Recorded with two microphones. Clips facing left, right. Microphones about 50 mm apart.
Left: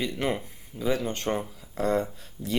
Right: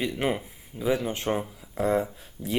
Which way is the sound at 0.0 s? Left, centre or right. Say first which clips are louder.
Right 1 dB; centre.